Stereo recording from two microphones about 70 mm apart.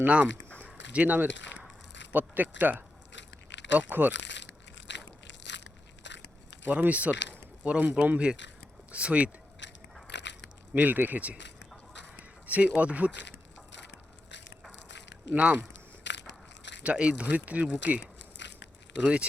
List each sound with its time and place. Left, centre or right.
0.0 s speech: centre
0.6 s a sound: right
2.1 s speech: right
6.7 s speech: right
10.8 s speech: right
12.5 s speech: right
16.8 s speech: centre
19.0 s speech: centre